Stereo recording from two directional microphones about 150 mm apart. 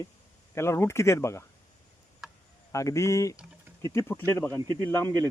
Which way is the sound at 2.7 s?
20° left (ahead or behind).